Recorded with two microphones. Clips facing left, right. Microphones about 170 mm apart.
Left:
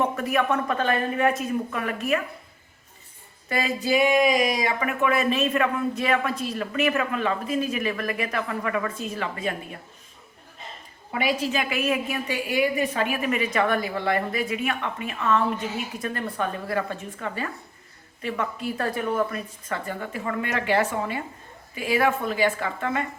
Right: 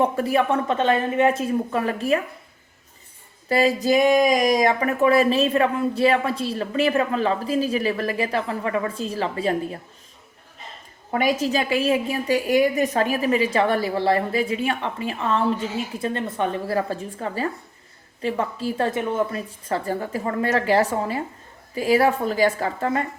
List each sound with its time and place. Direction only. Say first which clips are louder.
0.0 s speech: right 4 dB; 30° right (ahead or behind)
3.5 s speech: right 5 dB; 35° right (ahead or behind)
11.1 s speech: right 4 dB; 45° right (ahead or behind)